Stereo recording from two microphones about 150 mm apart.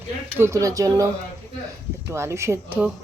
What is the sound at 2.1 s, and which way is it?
Speech, 20° right (ahead or behind).